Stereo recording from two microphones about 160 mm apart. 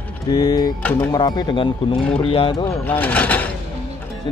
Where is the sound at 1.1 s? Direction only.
25° left (ahead or behind).